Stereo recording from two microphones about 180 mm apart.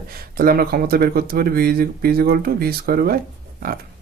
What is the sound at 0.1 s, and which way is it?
Speech, 55° right (ahead or behind).